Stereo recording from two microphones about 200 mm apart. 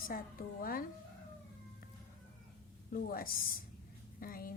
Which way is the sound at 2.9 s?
45° left (ahead or behind).